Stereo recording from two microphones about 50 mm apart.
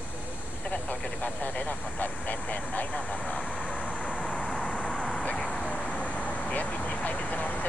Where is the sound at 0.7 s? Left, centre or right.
Left.